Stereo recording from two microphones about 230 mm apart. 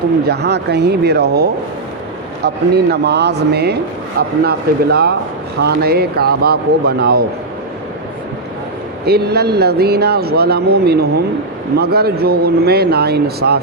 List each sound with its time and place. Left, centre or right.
0.3 s speech: right
9.0 s speech: right